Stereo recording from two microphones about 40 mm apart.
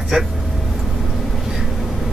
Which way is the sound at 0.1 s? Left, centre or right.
Centre.